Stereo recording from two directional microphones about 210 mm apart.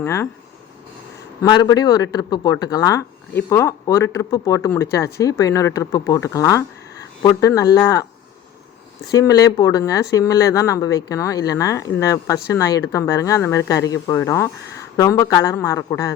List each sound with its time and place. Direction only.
0.0 s speech: 10° left (ahead or behind)
1.4 s speech: 20° left (ahead or behind)
9.0 s speech: 15° left (ahead or behind)